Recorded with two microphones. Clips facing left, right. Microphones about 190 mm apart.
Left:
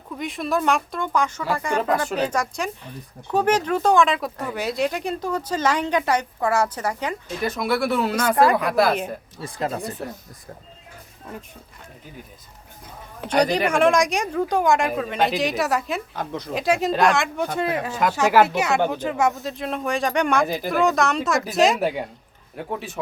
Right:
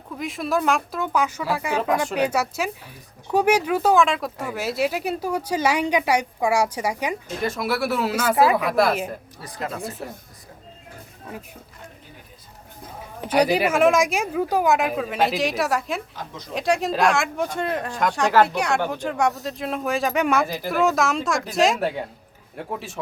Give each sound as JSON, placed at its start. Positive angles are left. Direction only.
{"t": 0.2, "sound": "speech", "side_deg": 0}
{"t": 9.4, "sound": "speech", "side_deg": 30}
{"t": 9.8, "sound": "speech", "side_deg": 0}
{"t": 13.2, "sound": "speech", "side_deg": -5}
{"t": 16.2, "sound": "speech", "side_deg": 60}
{"t": 16.6, "sound": "speech", "side_deg": 0}